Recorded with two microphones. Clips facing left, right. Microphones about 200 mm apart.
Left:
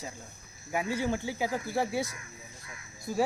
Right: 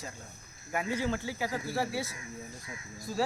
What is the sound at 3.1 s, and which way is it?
Speech, 15° left (ahead or behind).